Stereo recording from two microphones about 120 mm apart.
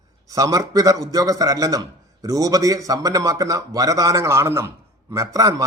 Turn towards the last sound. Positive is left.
turn(degrees=-30)  # may be behind; listen again after turning